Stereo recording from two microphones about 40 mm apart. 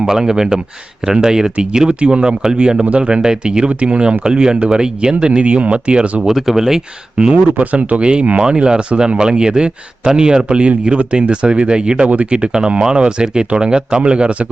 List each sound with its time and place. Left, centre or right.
0.0 s speech: centre
6.2 s speech: centre
7.6 s speech: right
8.0 s speech: right
12.0 s speech: right
12.3 s speech: right